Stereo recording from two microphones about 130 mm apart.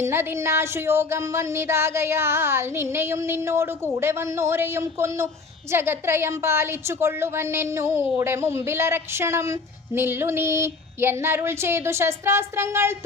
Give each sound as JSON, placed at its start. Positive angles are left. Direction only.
{"t": 0.0, "sound": "a woman's voice", "side_deg": -20}